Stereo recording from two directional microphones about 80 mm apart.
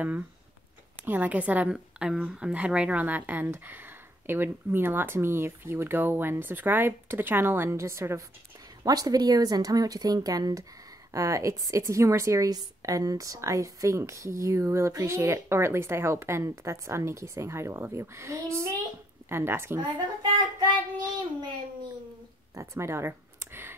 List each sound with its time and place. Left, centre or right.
1.0 s a woman's voice: right
8.8 s a woman's voice: right
19.8 s child singing: right
22.5 s a sound: right